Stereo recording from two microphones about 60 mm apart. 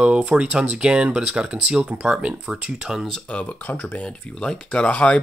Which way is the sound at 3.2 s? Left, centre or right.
Left.